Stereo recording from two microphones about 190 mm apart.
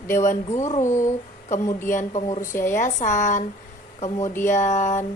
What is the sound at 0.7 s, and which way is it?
Speech, 15° left (ahead or behind).